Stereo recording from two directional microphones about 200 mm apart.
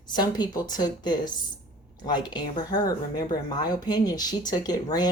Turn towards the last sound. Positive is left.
turn(degrees=20)  # may be behind; listen again after turning